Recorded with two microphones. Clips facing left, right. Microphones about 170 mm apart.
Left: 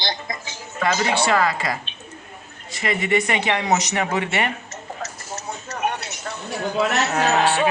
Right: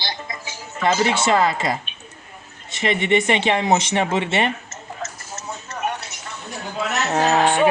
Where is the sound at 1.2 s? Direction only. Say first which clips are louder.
Right 2 dB; 20° right (ahead or behind).